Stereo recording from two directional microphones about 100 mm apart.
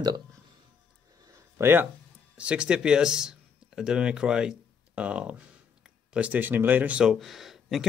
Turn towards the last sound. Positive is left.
turn(degrees=-5)  # may be behind; listen again after turning